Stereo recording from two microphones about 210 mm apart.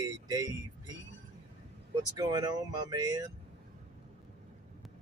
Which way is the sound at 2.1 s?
15° right (ahead or behind).